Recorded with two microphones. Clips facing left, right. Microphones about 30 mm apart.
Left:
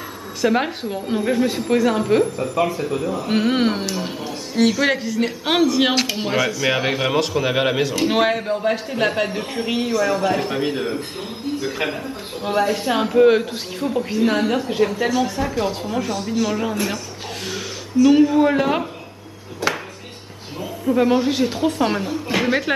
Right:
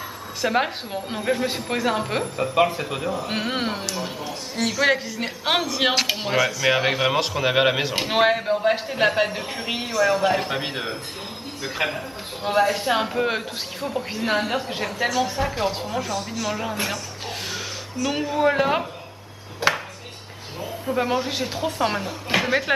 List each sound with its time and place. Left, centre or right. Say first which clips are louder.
0.4 s a woman's voice: left 3 dB; centre
3.6 s a man's voice: left 5 dB; centre
15.2 s a woman's voice: left 2 dB; centre
16.1 s a man's voice: left 5 dB; centre
18.0 s a man's voice: left 7 dB; centre
19.6 s speech: right 1 dB; right
20.9 s a man's voice: left 6 dB; centre